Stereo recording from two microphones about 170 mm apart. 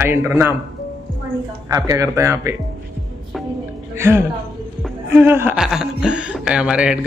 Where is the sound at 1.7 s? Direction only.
20° right (ahead or behind).